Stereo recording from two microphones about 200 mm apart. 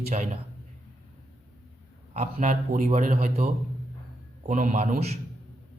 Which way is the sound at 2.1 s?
35° right (ahead or behind).